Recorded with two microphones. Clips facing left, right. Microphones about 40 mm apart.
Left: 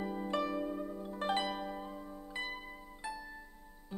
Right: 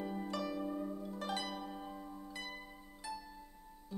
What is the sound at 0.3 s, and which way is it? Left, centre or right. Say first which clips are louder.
Music: left 7 dB; left.